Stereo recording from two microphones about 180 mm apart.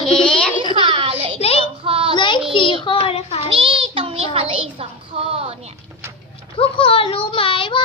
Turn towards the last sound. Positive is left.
turn(degrees=30)  # may be behind; listen again after turning